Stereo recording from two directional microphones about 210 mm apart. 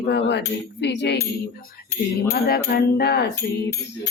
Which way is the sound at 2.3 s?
45° left (ahead or behind).